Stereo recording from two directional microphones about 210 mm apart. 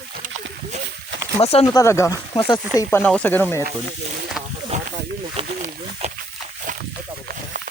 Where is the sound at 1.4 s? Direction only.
30° left (ahead or behind).